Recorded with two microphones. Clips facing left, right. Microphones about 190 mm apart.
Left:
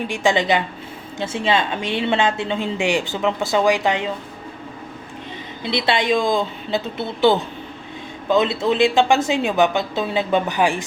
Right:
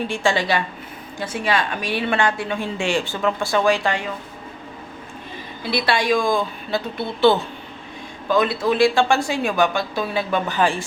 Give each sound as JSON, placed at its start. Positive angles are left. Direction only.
{"t": 0.0, "sound": "a woman's voice", "side_deg": 15}
{"t": 5.6, "sound": "a woman's voice", "side_deg": 20}